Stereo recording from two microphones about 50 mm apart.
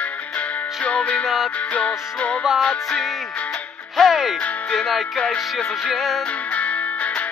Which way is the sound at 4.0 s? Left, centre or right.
Centre.